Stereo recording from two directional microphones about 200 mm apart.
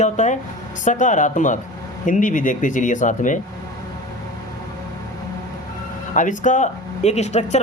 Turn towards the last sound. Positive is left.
turn(degrees=35)  # may be behind; listen again after turning